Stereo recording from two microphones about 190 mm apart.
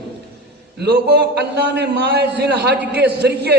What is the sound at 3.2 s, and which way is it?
Speech, 60° right (ahead or behind).